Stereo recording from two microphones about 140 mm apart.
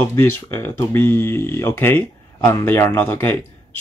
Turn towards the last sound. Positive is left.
turn(degrees=15)  # may be behind; listen again after turning